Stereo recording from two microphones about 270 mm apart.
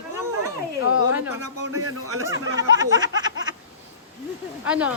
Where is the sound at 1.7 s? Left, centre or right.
Right.